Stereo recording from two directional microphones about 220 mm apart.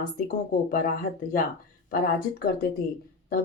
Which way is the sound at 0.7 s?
40° left (ahead or behind).